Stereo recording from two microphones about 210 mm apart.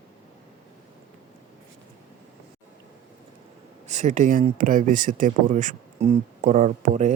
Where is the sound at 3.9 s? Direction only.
35° right (ahead or behind).